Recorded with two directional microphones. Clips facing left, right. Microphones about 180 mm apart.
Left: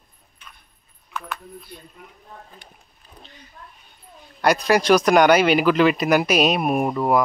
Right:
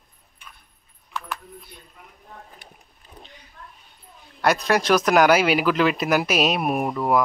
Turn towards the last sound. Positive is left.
turn(degrees=0)  # may be behind; listen again after turning